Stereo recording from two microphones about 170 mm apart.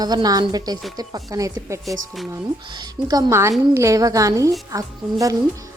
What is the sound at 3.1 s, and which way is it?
Speech, 20° right (ahead or behind).